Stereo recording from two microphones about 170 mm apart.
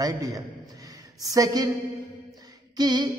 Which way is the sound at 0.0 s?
20° right (ahead or behind).